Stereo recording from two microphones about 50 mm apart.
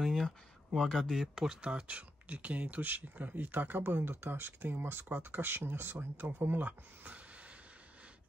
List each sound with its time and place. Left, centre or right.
0.0 s a sound: centre
0.7 s speech: centre
1.0 s speech: centre
1.6 s speech: right